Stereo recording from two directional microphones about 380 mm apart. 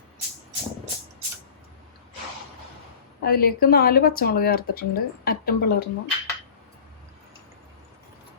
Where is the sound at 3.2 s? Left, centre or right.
Left.